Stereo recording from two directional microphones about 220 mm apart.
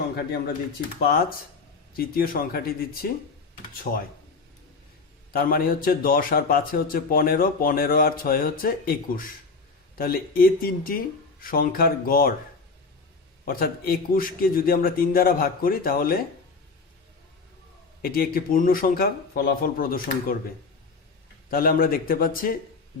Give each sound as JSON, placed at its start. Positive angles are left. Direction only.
{"t": 2.0, "sound": "a man's voice", "side_deg": 40}
{"t": 5.3, "sound": "a man's voice", "side_deg": 40}
{"t": 13.4, "sound": "a man's voice", "side_deg": 40}
{"t": 18.0, "sound": "a man's voice", "side_deg": 40}
{"t": 21.5, "sound": "a man's voice", "side_deg": 40}